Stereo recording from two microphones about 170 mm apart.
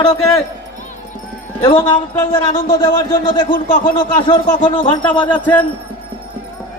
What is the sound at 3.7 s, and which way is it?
A man's voice, 30° left (ahead or behind).